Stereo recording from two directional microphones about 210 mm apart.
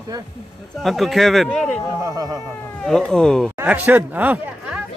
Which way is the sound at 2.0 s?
15° right (ahead or behind).